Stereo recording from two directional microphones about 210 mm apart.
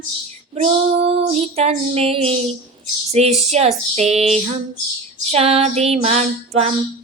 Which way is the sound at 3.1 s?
30° right (ahead or behind).